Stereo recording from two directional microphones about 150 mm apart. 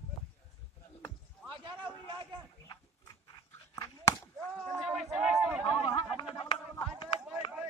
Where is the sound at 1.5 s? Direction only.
35° right (ahead or behind).